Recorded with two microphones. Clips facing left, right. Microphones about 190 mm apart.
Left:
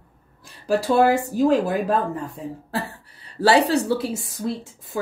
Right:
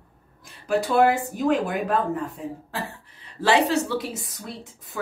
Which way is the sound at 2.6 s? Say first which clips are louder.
Left 4 dB; 35° left (ahead or behind).